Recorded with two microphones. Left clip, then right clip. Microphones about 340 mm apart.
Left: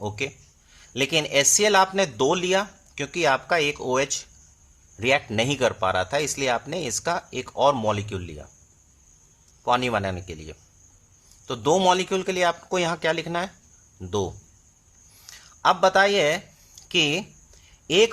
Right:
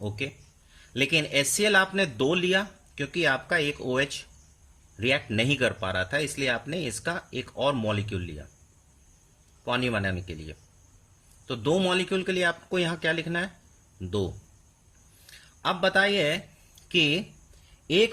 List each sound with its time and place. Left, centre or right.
0.9 s speech: centre
9.6 s speech: centre
11.4 s a man's voice: centre
15.6 s speech: centre